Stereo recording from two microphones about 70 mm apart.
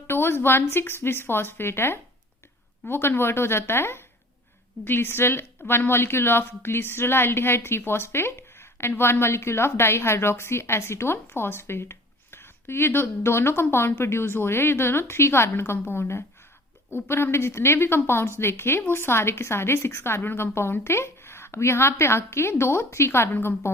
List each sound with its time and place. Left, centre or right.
0.1 s a woman's voice: left